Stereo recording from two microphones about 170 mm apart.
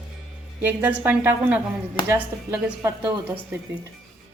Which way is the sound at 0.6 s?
10° right (ahead or behind).